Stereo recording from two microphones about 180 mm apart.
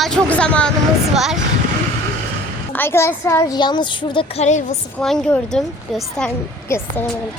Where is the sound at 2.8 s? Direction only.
15° left (ahead or behind); by 4.7 s 40° left (ahead or behind).